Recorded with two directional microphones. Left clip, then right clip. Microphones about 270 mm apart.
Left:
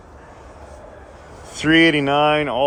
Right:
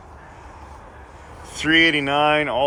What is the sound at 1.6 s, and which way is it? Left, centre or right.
Speech, left.